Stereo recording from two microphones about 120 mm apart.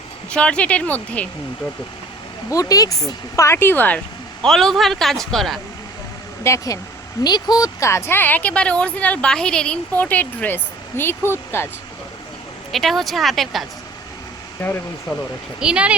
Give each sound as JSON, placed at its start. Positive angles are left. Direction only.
{"t": 0.3, "sound": "a woman's voice", "side_deg": 10}
{"t": 2.5, "sound": "a woman's voice", "side_deg": 30}
{"t": 4.4, "sound": "speech", "side_deg": 0}
{"t": 6.4, "sound": "speech", "side_deg": 25}
{"t": 7.3, "sound": "a woman's voice", "side_deg": 35}
{"t": 12.7, "sound": "speech", "side_deg": 0}
{"t": 14.6, "sound": "a woman's voice", "side_deg": 20}
{"t": 15.6, "sound": "speech", "side_deg": -10}